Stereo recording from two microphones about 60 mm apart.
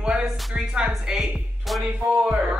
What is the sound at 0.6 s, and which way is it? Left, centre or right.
Speech, centre.